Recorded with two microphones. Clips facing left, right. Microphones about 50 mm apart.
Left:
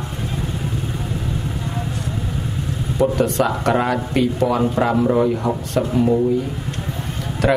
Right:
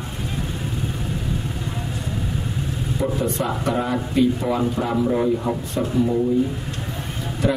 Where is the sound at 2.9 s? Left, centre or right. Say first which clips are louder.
Left 6 dB; left.